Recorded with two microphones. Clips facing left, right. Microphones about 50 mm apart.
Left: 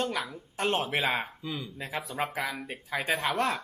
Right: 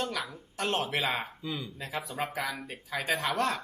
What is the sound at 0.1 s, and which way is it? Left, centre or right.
Speech, left.